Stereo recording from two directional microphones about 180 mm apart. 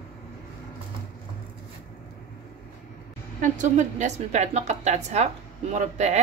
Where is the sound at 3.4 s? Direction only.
40° right (ahead or behind).